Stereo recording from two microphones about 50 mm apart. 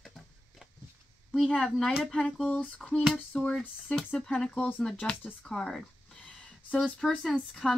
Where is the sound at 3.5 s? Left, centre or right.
Centre.